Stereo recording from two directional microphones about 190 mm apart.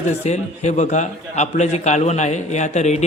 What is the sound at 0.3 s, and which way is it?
A man's voice, 40° left (ahead or behind).